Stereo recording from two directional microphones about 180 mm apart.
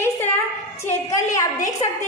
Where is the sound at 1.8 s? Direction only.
35° left (ahead or behind).